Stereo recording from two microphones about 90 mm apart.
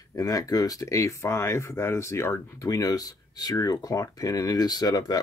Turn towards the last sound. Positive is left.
turn(degrees=40)  # may be behind; listen again after turning